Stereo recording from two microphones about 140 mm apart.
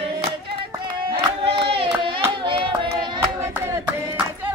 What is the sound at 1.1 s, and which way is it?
Crowd, 40° right (ahead or behind).